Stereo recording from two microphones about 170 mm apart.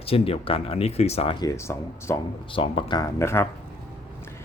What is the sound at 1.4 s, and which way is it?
Speech, 20° left (ahead or behind).